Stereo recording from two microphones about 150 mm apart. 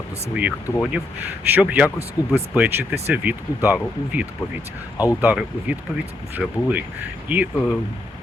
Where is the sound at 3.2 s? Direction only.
15° right (ahead or behind).